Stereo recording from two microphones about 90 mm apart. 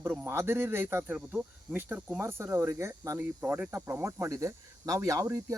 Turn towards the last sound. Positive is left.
turn(degrees=-40)  # may be behind; listen again after turning